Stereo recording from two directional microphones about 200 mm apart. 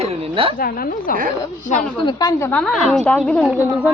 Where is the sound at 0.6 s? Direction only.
45° left (ahead or behind).